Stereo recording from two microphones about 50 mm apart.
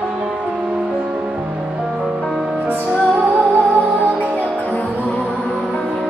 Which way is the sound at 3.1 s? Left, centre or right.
Right.